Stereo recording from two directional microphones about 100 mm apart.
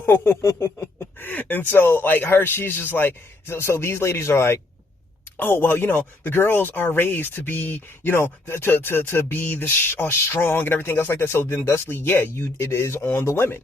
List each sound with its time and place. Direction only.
0.0 s speech: 25° left (ahead or behind)